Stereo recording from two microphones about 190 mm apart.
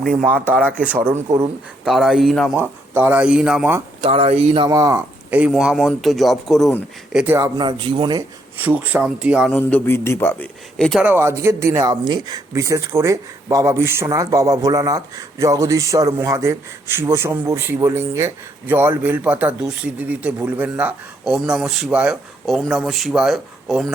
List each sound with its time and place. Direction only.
0.2 s speech: 10° right (ahead or behind)
2.6 s speech: 10° right (ahead or behind)
4.0 s speech: 30° right (ahead or behind)
4.7 s a man's voice: 15° right (ahead or behind)
5.4 s speech: 5° right (ahead or behind)
7.2 s speech: 15° right (ahead or behind)
8.5 s speech: 10° right (ahead or behind)
9.5 s a man's voice: 5° left (ahead or behind)
11.0 s speech: 10° right (ahead or behind)